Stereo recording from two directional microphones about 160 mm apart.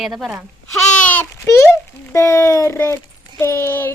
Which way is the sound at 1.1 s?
15° left (ahead or behind).